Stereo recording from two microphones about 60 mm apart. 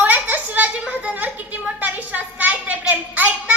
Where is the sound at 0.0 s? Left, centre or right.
Right.